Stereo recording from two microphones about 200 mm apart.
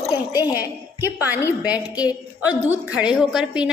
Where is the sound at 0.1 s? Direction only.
20° left (ahead or behind).